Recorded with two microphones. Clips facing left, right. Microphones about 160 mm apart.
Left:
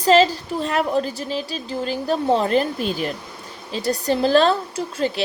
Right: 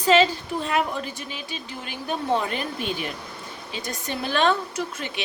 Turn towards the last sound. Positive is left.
turn(degrees=35)  # may be behind; listen again after turning